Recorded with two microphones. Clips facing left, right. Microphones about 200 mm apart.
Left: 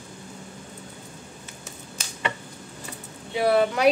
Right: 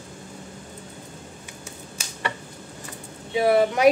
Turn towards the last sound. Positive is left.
turn(degrees=-20)  # may be behind; listen again after turning